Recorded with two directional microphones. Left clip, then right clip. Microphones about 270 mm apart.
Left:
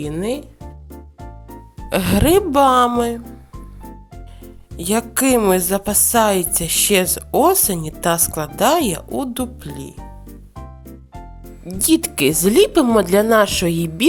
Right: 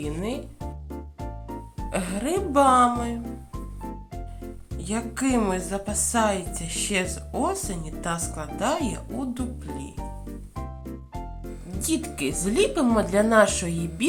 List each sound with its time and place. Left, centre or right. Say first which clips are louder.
0.0 s speech: left 8 dB; left
0.6 s music: right 1 dB; centre
1.9 s speech: left 12 dB; left
3.2 s music: right 1 dB; centre
4.8 s speech: left 10 dB; left
10.0 s music: right 1 dB; centre
11.8 s speech: left 11 dB; left